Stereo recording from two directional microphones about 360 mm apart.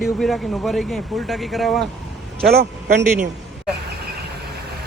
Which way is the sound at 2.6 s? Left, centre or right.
Right.